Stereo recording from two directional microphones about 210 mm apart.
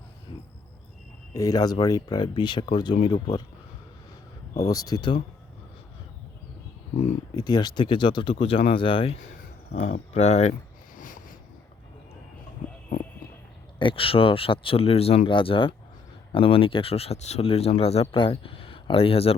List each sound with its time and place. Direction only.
1.3 s speech: 15° left (ahead or behind)
4.6 s speech: 15° left (ahead or behind)
7.3 s speech: 20° left (ahead or behind)
9.7 s speech: 35° left (ahead or behind)
10.9 s a sound: 40° left (ahead or behind)
13.7 s speech: 25° left (ahead or behind)